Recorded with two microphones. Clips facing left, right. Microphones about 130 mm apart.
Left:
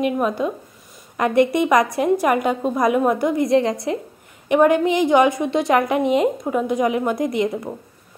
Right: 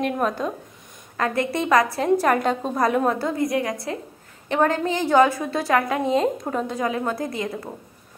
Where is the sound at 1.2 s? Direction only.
20° left (ahead or behind).